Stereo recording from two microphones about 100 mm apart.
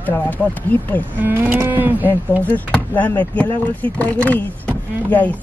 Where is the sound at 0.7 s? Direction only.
15° left (ahead or behind).